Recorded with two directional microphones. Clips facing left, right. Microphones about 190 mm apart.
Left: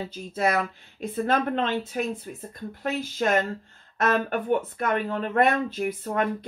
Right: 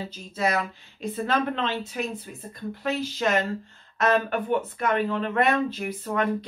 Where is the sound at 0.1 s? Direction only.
55° left (ahead or behind).